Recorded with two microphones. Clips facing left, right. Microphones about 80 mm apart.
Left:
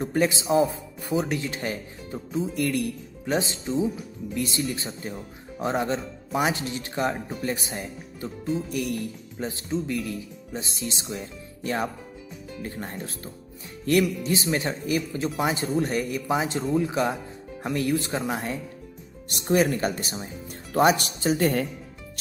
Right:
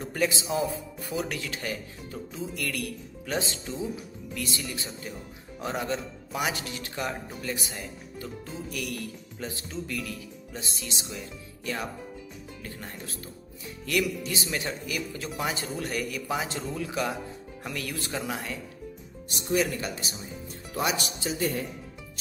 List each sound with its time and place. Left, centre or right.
0.0 s speech: left
19.2 s speech: left